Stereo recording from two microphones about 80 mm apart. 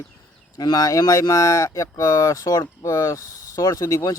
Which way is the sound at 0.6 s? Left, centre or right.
Left.